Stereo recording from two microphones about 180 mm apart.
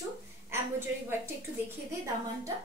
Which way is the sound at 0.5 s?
15° right (ahead or behind).